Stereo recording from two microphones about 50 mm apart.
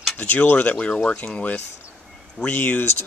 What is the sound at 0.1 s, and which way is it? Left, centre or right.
Speech, left.